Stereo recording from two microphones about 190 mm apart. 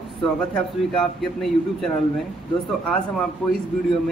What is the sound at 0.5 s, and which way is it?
A man's voice, centre (ahead or behind).